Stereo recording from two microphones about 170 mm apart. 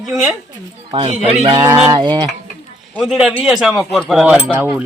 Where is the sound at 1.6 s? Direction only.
15° right (ahead or behind).